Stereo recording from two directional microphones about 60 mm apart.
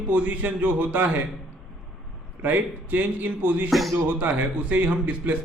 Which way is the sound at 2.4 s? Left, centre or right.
Right.